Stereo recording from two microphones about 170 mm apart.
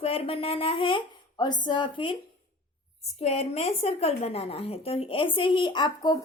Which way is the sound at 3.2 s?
35° left (ahead or behind).